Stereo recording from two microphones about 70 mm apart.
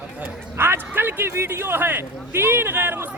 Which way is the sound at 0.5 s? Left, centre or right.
Right.